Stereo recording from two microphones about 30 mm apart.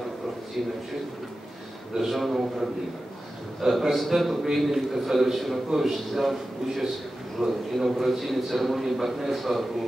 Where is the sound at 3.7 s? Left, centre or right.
Centre.